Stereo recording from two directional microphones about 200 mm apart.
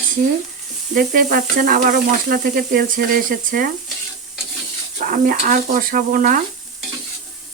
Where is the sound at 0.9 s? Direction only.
45° right (ahead or behind).